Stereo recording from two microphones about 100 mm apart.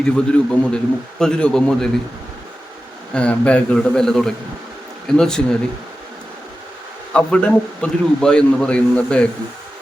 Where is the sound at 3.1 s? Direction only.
10° left (ahead or behind).